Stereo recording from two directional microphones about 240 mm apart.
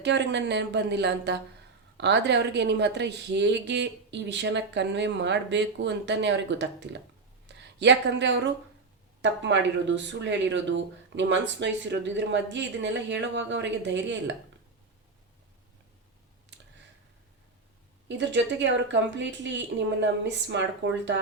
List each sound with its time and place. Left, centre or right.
0.0 s a woman's voice: right
18.2 s a woman's voice: right